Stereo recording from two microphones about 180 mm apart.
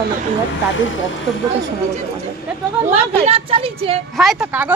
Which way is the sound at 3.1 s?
35° right (ahead or behind).